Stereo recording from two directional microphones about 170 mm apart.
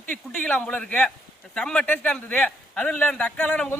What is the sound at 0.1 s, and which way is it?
A man's voice, 10° left (ahead or behind).